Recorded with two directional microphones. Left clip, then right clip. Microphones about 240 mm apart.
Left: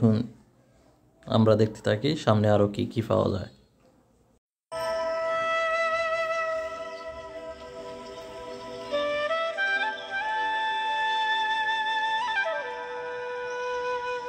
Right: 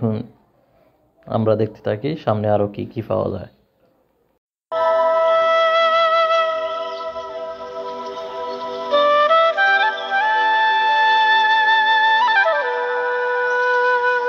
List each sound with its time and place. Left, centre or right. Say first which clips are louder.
0.0 s speech: right 2 dB; centre
2.7 s speech: right 2 dB; left
3.0 s speech: right 4 dB; centre
5.0 s music: right 11 dB; right